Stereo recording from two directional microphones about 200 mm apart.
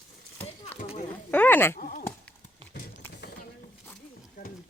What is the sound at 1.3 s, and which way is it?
Sheep, 10° left (ahead or behind).